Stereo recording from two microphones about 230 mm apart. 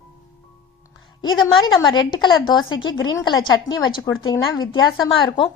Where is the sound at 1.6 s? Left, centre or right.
Centre.